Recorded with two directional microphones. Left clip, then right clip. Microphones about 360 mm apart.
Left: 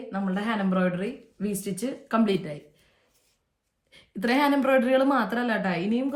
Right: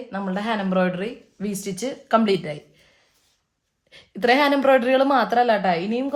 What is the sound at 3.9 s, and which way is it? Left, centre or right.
A woman's voice, right.